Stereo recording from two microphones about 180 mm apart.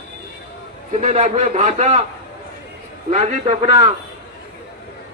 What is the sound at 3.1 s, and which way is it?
Speech, 40° right (ahead or behind).